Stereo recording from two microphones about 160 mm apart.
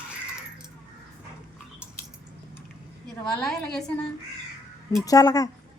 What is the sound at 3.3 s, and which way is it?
Speech, 5° left (ahead or behind).